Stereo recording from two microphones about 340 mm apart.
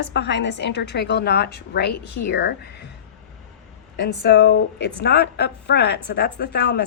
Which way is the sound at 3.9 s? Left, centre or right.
Left.